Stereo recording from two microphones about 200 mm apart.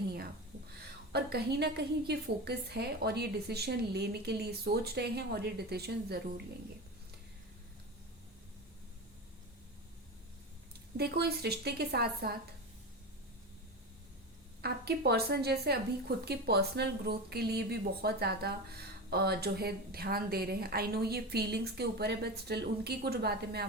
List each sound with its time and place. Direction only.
1.1 s a woman's voice: 55° right (ahead or behind)
10.9 s a woman's voice: 55° right (ahead or behind)
14.6 s a woman's voice: 55° right (ahead or behind)